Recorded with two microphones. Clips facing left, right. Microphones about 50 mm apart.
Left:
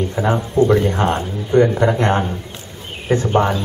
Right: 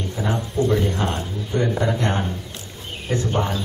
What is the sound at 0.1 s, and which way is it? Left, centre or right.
A man's voice, left.